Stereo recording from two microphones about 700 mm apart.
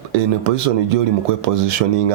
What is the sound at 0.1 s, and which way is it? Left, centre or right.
Speech, right.